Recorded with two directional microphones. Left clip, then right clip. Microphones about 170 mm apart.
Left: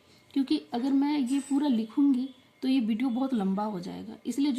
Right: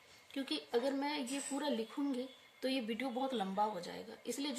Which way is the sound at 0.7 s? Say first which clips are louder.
Left 3 dB; 25° left (ahead or behind).